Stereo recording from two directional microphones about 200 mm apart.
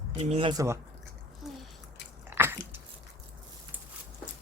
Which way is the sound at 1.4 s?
Centre (ahead or behind).